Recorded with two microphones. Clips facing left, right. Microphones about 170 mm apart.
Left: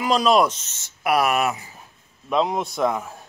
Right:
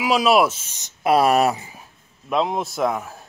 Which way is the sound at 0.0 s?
5° right (ahead or behind).